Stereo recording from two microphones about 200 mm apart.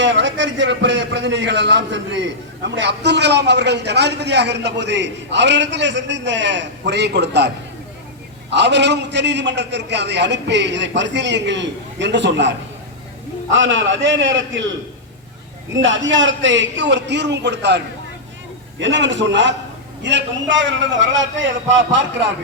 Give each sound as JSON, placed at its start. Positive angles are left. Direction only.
{"t": 0.0, "sound": "a man's voice", "side_deg": -65}
{"t": 15.7, "sound": "a man's voice", "side_deg": -70}